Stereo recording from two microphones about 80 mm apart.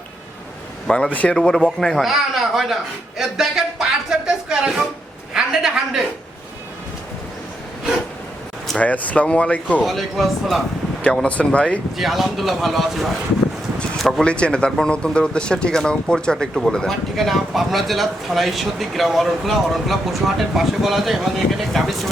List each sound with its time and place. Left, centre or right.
0.9 s speech: centre
1.4 s a woman's voice: centre
8.8 s speech: centre
9.8 s speech: centre
11.0 s speech: centre
11.9 s speech: centre